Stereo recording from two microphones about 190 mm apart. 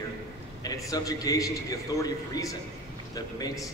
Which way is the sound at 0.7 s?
20° left (ahead or behind).